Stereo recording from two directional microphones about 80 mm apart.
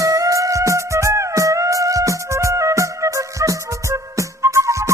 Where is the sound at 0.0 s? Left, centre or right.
Right.